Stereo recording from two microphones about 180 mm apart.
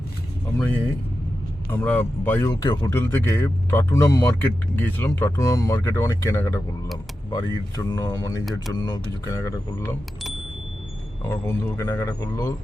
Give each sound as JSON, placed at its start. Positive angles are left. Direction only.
{"t": 0.5, "sound": "speech", "side_deg": 10}
{"t": 7.8, "sound": "a sound", "side_deg": 20}
{"t": 8.7, "sound": "speech", "side_deg": 20}
{"t": 11.3, "sound": "speech", "side_deg": 15}